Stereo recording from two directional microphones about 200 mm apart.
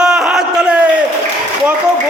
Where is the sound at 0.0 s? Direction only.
Centre (ahead or behind).